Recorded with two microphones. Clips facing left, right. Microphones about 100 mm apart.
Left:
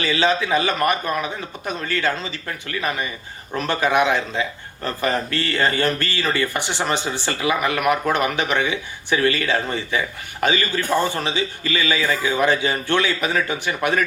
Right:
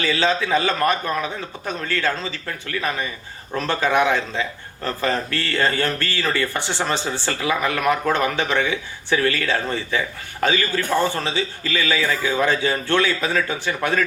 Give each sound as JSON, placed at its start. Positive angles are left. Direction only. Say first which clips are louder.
{"t": 0.0, "sound": "a man's voice", "louder": "left 1 dB", "side_deg": 15}
{"t": 3.6, "sound": "a man's voice", "louder": "even", "side_deg": 15}